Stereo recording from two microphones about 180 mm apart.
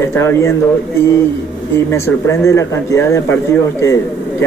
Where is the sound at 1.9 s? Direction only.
15° left (ahead or behind).